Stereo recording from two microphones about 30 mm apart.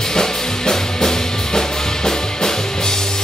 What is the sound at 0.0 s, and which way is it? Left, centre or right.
Music, centre.